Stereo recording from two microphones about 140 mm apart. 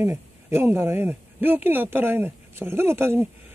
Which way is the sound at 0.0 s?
20° right (ahead or behind).